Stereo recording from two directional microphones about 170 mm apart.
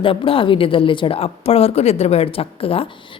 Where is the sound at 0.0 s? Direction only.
30° left (ahead or behind).